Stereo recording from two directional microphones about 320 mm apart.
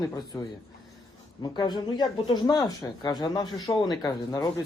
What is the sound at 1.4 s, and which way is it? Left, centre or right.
Speech, centre.